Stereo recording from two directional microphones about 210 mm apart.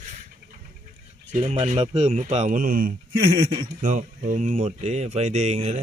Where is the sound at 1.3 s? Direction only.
30° right (ahead or behind).